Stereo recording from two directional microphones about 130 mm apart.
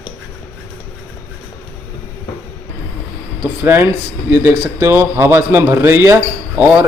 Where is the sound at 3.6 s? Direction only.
15° right (ahead or behind).